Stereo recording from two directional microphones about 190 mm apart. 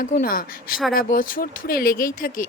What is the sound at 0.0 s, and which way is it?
Speech, 45° left (ahead or behind).